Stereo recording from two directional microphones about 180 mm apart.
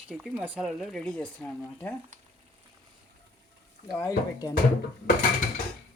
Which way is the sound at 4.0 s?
20° left (ahead or behind).